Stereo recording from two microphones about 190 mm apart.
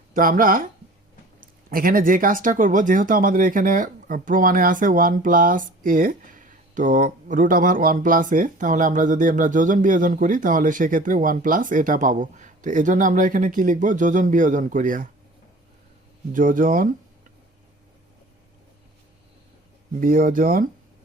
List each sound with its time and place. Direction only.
0.1 s speech: 45° right (ahead or behind)
16.3 s speech: 45° right (ahead or behind)
20.0 s speech: 45° right (ahead or behind)